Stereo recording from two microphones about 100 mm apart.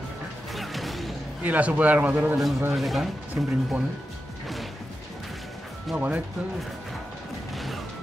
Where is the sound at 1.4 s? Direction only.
15° right (ahead or behind).